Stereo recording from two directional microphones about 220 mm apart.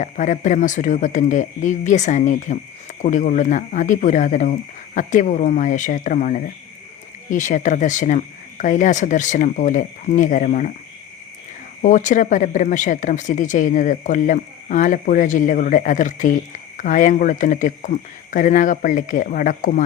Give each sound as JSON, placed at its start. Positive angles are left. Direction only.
{"t": 0.0, "sound": "speech", "side_deg": 35}
{"t": 11.8, "sound": "speech", "side_deg": 35}